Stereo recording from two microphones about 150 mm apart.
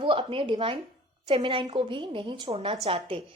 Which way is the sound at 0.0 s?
35° right (ahead or behind).